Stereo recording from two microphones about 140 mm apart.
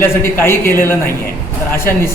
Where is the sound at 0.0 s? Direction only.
15° left (ahead or behind).